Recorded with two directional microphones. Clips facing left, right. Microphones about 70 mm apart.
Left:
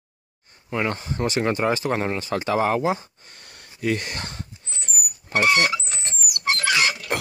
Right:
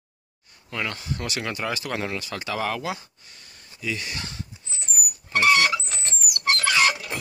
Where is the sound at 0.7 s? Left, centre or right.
Left.